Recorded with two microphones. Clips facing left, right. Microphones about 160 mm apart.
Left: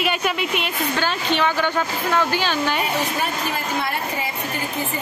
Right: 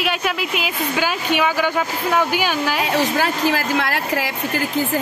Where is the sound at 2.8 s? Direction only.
90° right.